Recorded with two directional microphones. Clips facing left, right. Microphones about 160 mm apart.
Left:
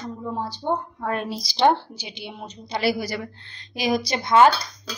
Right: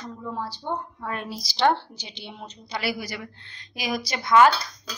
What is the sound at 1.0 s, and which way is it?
Speech, 45° left (ahead or behind).